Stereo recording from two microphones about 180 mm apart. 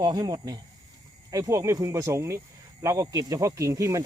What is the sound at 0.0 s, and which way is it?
Speech, 20° right (ahead or behind).